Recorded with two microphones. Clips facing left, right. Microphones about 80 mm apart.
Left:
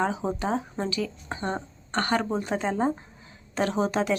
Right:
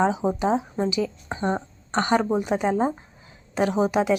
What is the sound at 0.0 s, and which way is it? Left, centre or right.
A woman's voice, centre.